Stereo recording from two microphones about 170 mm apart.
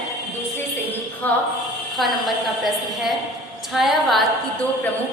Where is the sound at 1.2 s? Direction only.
10° left (ahead or behind).